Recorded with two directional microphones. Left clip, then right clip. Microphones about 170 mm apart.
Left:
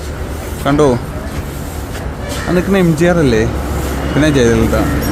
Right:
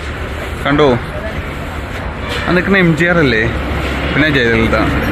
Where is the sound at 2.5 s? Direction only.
20° left (ahead or behind).